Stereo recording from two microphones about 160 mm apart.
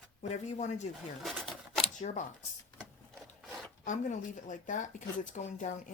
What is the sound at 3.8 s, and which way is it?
Speech, 50° left (ahead or behind).